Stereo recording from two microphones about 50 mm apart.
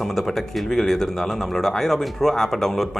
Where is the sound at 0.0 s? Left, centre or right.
Centre.